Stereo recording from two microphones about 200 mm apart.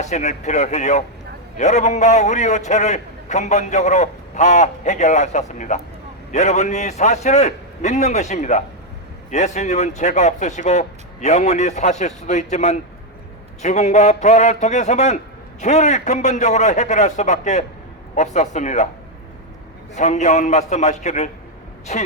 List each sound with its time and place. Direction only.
0.0 s a man's voice: 35° left (ahead or behind)
20.0 s a man's voice: 35° left (ahead or behind)